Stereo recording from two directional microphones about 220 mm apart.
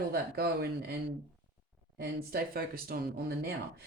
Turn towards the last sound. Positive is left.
turn(degrees=-45)  # may be behind; listen again after turning